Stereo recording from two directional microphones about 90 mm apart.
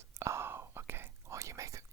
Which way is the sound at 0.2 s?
30° right (ahead or behind).